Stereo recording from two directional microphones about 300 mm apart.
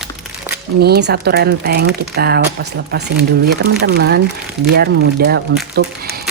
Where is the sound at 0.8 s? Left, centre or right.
Right.